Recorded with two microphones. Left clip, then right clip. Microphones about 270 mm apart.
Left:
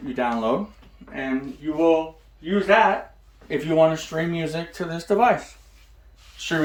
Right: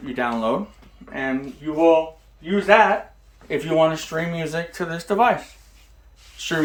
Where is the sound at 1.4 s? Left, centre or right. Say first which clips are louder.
Right 2 dB; centre.